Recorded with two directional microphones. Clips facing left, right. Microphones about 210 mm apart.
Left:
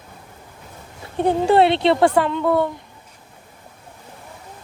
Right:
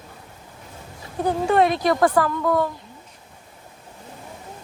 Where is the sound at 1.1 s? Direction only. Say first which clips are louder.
Left 4 dB; 30° left (ahead or behind).